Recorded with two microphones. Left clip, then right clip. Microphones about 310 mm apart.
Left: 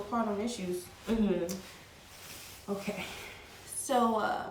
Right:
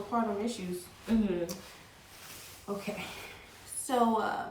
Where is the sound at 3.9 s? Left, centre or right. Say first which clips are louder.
Even; centre.